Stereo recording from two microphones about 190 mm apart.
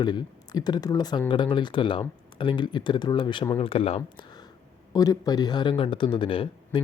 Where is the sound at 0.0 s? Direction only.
25° left (ahead or behind).